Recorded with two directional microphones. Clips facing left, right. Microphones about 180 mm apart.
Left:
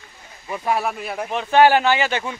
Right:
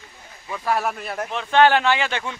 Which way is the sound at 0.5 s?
10° left (ahead or behind).